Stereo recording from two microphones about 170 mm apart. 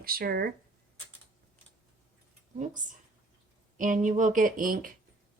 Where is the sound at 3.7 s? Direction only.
50° right (ahead or behind).